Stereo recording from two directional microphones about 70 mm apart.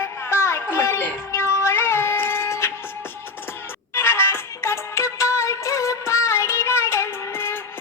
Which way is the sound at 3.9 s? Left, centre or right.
Left.